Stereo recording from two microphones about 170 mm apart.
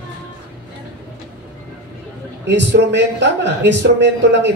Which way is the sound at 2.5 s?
90° right.